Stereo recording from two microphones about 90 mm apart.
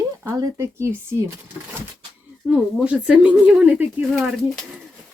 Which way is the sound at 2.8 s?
10° right (ahead or behind).